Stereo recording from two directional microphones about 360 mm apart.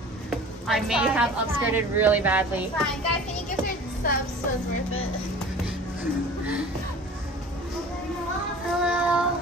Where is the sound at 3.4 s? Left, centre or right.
Left.